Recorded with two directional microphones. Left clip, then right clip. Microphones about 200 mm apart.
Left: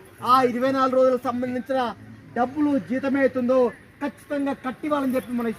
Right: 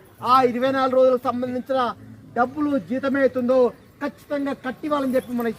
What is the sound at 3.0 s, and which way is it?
Speech, 10° left (ahead or behind).